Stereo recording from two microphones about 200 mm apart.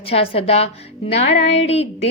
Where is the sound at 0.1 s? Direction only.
30° left (ahead or behind).